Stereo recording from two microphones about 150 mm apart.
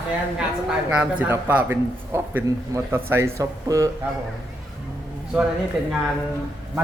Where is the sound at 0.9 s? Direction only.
10° right (ahead or behind).